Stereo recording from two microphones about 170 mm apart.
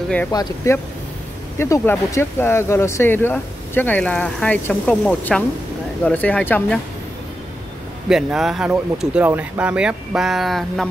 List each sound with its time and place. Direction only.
0.3 s speech: 20° left (ahead or behind)
8.1 s speech: 5° right (ahead or behind)